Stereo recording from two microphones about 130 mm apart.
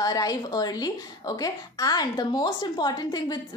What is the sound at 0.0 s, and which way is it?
A woman's voice, 30° left (ahead or behind).